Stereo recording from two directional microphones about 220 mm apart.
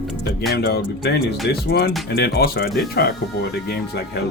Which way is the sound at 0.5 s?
45° left (ahead or behind).